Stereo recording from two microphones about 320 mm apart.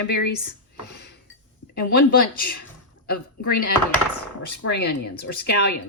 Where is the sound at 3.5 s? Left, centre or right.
Left.